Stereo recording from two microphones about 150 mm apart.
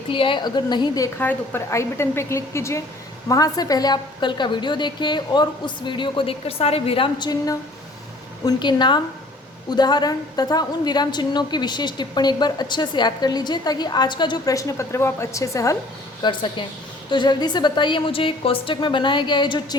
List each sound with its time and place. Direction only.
0.1 s a woman's voice: 35° left (ahead or behind)
1.2 s a woman's voice: 15° left (ahead or behind)
16.2 s a woman's voice: 30° left (ahead or behind)